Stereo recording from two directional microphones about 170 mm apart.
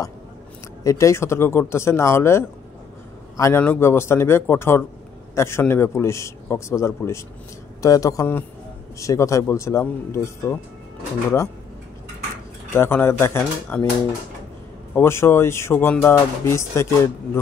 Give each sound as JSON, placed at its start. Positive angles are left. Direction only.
{"t": 0.8, "sound": "speech", "side_deg": 20}
{"t": 12.7, "sound": "speech", "side_deg": 15}
{"t": 15.0, "sound": "speech", "side_deg": 15}